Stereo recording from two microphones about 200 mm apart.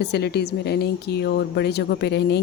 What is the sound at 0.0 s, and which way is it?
A woman's voice, 55° left (ahead or behind).